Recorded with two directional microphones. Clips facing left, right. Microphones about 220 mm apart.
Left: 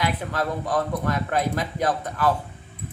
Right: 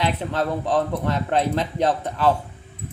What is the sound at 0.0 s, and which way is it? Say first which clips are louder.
Speech: right 2 dB; 25° right (ahead or behind).